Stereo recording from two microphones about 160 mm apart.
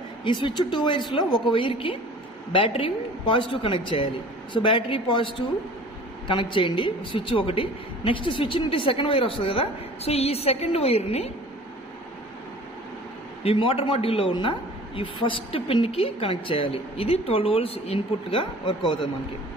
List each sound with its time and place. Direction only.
0.2 s a woman's voice: 30° left (ahead or behind)
13.4 s a woman's voice: 35° left (ahead or behind)